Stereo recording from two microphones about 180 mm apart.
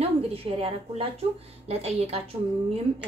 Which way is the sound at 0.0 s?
35° right (ahead or behind).